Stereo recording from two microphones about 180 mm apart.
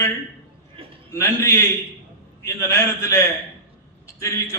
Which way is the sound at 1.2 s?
15° left (ahead or behind).